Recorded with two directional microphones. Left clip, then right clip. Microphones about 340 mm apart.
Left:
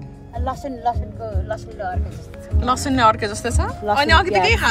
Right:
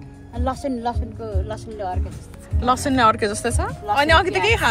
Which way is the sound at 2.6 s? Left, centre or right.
Centre.